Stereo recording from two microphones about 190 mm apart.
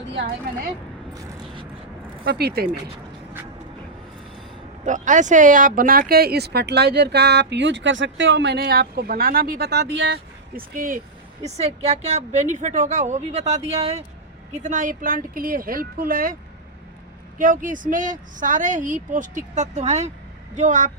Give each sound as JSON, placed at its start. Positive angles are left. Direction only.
{"t": 0.1, "sound": "a woman's voice", "side_deg": -65}
{"t": 2.2, "sound": "speech", "side_deg": -55}
{"t": 4.9, "sound": "speech", "side_deg": -40}
{"t": 11.4, "sound": "a woman's voice", "side_deg": -35}